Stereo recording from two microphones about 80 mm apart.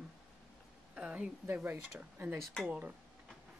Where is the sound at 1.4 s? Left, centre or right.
Right.